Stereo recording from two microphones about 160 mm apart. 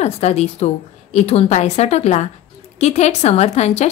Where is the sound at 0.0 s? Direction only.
40° left (ahead or behind).